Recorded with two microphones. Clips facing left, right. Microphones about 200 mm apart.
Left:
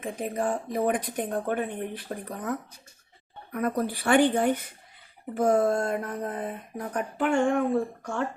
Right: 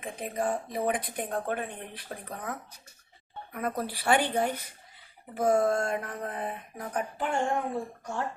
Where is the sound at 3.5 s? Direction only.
45° left (ahead or behind).